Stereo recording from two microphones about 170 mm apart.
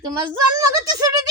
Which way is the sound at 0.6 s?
20° right (ahead or behind).